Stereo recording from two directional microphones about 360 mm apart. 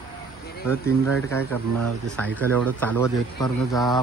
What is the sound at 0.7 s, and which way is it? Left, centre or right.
A man's voice, centre.